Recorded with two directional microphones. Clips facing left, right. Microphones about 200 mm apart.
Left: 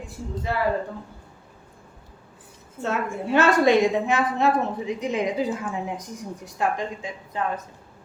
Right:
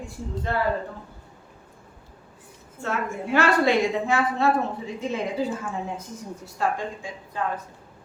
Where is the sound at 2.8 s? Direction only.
20° left (ahead or behind).